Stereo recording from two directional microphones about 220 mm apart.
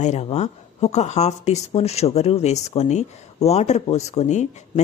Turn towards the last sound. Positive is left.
turn(degrees=30)  # may be behind; listen again after turning